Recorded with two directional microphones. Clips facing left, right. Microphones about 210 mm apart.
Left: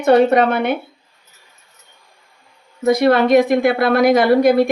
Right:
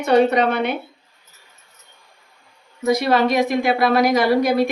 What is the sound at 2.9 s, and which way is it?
A woman's voice, 55° left (ahead or behind).